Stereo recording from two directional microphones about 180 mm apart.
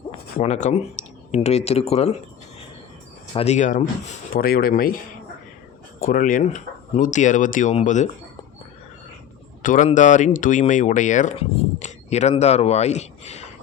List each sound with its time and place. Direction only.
0.3 s speech: 40° left (ahead or behind)
3.3 s speech: 40° left (ahead or behind)
4.4 s speech: 55° left (ahead or behind)
6.0 s speech: 50° left (ahead or behind)
9.6 s speech: 45° left (ahead or behind)